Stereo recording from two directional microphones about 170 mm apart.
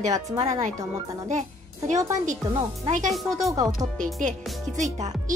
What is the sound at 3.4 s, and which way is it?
Speech, 20° right (ahead or behind).